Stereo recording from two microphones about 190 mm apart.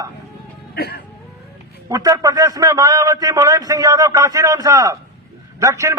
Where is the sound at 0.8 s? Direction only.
60° left (ahead or behind).